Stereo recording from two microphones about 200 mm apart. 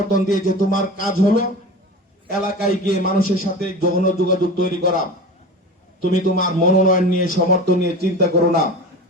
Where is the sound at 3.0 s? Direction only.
45° left (ahead or behind).